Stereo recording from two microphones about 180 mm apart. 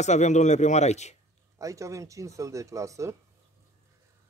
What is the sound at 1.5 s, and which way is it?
Speech, 15° right (ahead or behind).